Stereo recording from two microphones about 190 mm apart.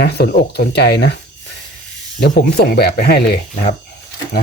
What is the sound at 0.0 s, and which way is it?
Speech, 60° left (ahead or behind).